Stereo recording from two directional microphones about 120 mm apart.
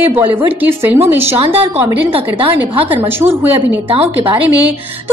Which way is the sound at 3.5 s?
55° right (ahead or behind).